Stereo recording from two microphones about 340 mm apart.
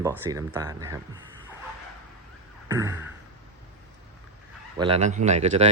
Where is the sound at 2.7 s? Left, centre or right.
Centre.